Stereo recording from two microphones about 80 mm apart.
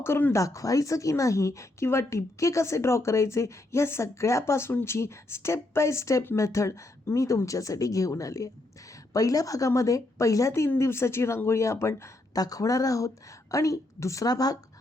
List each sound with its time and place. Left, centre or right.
0.0 s speech: left
0.3 s speech: left
12.3 s speech: left